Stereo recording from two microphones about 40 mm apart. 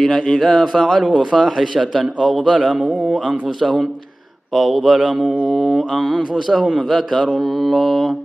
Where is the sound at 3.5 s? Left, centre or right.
Centre.